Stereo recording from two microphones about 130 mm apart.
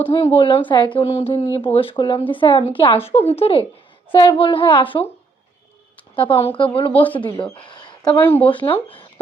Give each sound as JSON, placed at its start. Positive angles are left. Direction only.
{"t": 0.0, "sound": "speech", "side_deg": 45}
{"t": 6.1, "sound": "speech", "side_deg": 40}
{"t": 6.9, "sound": "speech", "side_deg": 15}
{"t": 7.2, "sound": "speech", "side_deg": 35}
{"t": 7.5, "sound": "a sound", "side_deg": 35}
{"t": 8.2, "sound": "speech", "side_deg": 15}
{"t": 8.7, "sound": "speech", "side_deg": 40}